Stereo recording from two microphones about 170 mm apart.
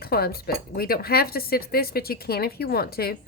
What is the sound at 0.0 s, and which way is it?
A woman's voice, 65° left (ahead or behind).